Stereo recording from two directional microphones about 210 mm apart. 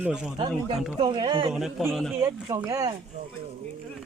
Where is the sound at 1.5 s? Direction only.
5° right (ahead or behind).